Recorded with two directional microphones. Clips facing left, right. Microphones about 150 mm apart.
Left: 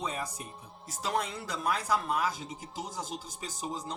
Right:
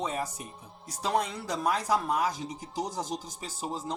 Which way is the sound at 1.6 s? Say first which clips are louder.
Right 3 dB; 35° right (ahead or behind).